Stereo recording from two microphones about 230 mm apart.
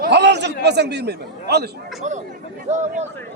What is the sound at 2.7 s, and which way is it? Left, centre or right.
Speech, right.